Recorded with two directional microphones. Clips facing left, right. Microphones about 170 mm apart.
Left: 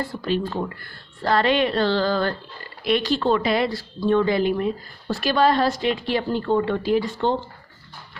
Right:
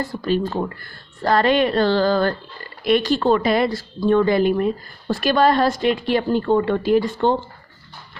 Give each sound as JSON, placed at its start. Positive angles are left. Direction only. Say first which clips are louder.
{"t": 0.0, "sound": "a woman's voice", "louder": "right 3 dB", "side_deg": -40}